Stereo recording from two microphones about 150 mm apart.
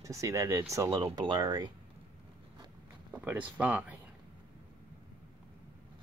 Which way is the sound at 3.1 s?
10° right (ahead or behind).